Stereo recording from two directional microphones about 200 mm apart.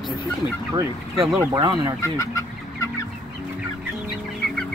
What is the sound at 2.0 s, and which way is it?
Speech, 15° left (ahead or behind).